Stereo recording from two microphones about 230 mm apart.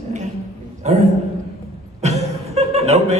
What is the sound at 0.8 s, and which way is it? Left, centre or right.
Speech, right.